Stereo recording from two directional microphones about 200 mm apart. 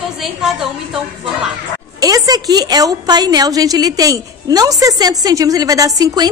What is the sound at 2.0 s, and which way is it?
A woman's voice, 20° right (ahead or behind).